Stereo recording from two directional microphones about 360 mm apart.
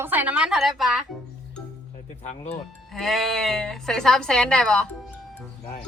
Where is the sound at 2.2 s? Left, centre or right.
Centre.